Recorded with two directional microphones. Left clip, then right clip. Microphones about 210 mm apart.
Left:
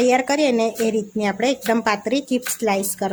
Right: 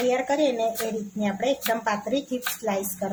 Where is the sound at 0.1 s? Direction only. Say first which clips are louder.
Left 5 dB; 55° left (ahead or behind).